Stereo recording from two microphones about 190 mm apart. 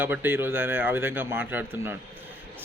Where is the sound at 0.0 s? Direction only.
10° right (ahead or behind).